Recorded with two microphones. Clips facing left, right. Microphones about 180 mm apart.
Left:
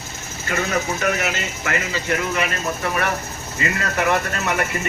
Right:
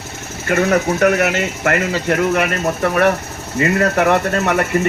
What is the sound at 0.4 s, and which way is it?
Speech, 60° right (ahead or behind).